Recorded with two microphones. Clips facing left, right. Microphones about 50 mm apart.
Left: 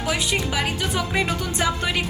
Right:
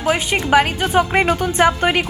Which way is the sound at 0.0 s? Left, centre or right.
Right.